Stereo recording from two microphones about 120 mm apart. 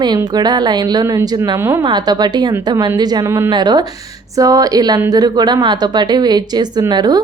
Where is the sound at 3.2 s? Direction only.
25° right (ahead or behind).